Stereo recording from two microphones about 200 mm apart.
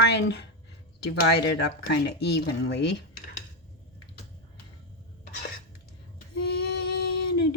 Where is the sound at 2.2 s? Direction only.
55° left (ahead or behind).